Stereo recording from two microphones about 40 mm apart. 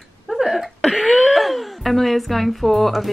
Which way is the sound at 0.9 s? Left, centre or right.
Centre.